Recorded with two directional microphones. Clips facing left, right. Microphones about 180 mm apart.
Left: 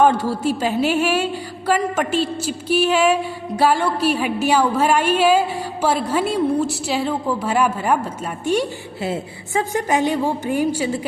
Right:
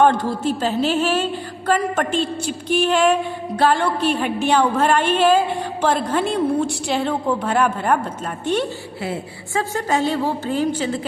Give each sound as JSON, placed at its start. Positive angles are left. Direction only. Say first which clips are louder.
{"t": 0.0, "sound": "a woman's voice", "louder": "even", "side_deg": 10}
{"t": 9.0, "sound": "a woman's voice", "louder": "left 3 dB", "side_deg": 20}